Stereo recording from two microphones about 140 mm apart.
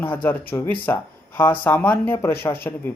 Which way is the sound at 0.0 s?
10° left (ahead or behind).